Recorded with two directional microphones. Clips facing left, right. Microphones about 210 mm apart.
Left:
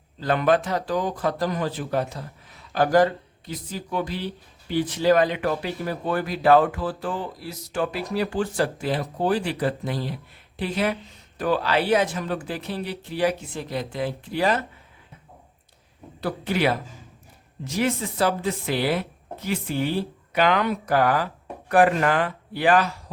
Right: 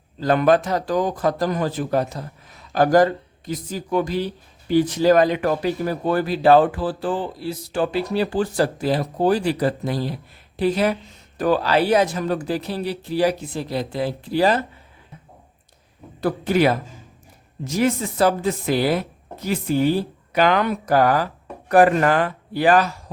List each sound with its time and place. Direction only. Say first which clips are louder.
0.2 s a man's voice: right 4 dB; 40° right (ahead or behind)
16.2 s a man's voice: right 5 dB; 45° right (ahead or behind)